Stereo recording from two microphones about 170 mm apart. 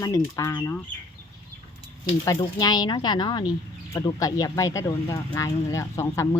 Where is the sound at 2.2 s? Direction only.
20° left (ahead or behind).